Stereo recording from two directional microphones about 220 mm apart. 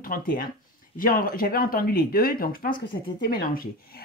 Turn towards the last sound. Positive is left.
turn(degrees=40)  # may be behind; listen again after turning